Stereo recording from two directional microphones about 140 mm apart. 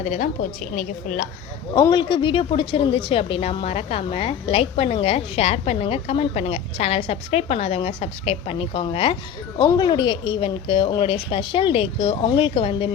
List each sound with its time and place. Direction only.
0.0 s a woman's voice: 60° left (ahead or behind)
0.8 s a woman's voice: 70° left (ahead or behind)
1.7 s a woman's voice: 35° left (ahead or behind)
9.6 s speech: 30° left (ahead or behind)